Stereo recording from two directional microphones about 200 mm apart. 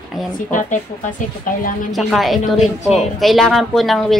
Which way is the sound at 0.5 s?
40° left (ahead or behind).